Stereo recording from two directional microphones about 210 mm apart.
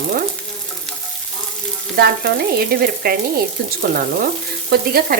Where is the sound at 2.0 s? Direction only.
50° right (ahead or behind).